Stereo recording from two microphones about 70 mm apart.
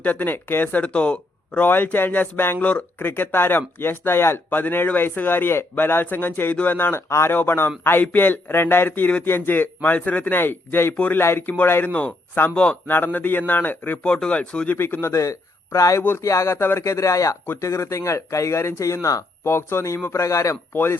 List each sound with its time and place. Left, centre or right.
0.0 s speech: left
11.2 s speech: left
14.0 s speech: centre
14.7 s speech: left
15.0 s speech: left
16.0 s speech: left
16.2 s a man's voice: left
16.6 s a man's voice: left
20.7 s speech: left